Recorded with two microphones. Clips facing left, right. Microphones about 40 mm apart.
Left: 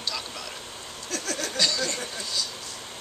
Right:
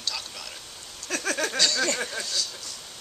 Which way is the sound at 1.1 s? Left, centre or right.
Right.